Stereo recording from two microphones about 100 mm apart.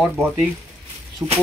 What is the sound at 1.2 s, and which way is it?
Speech, 30° right (ahead or behind).